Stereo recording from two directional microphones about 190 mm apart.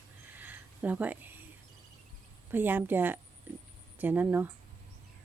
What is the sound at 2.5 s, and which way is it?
A woman's voice, 10° right (ahead or behind).